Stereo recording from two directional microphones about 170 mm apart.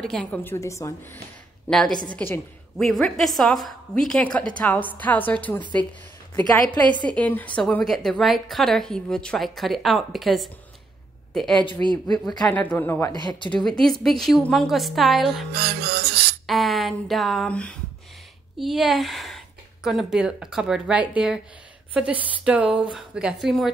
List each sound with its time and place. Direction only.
0.0 s a woman's voice: 5° left (ahead or behind)
1.7 s a woman's voice: 5° left (ahead or behind)
6.9 s a woman's voice: 25° right (ahead or behind)
7.2 s a woman's voice: 10° left (ahead or behind)
13.1 s speech: 25° left (ahead or behind)
13.5 s a woman's voice: centre (ahead or behind)
15.5 s music: 65° right (ahead or behind)
16.4 s a woman's voice: centre (ahead or behind)